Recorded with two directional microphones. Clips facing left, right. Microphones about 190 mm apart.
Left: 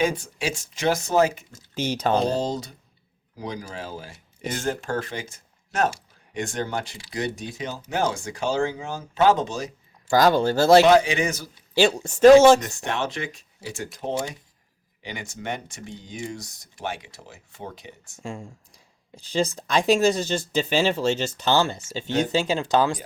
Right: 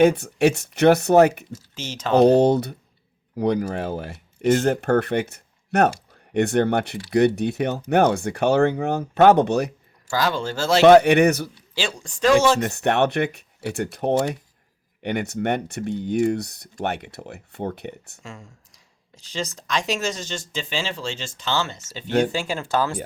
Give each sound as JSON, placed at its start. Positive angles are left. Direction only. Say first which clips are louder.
{"t": 0.0, "sound": "speech", "louder": "right 9 dB", "side_deg": -60}
{"t": 1.7, "sound": "speech", "louder": "left 9 dB", "side_deg": 60}
{"t": 2.1, "sound": "speech", "louder": "right 14 dB", "side_deg": -65}
{"t": 10.1, "sound": "speech", "louder": "left 5 dB", "side_deg": 40}
{"t": 10.8, "sound": "speech", "louder": "right 6 dB", "side_deg": -60}
{"t": 11.8, "sound": "speech", "louder": "left 8 dB", "side_deg": 40}
{"t": 12.5, "sound": "speech", "louder": "right 8 dB", "side_deg": -65}
{"t": 18.2, "sound": "speech", "louder": "left 6 dB", "side_deg": 30}
{"t": 22.3, "sound": "speech", "louder": "left 3 dB", "side_deg": 20}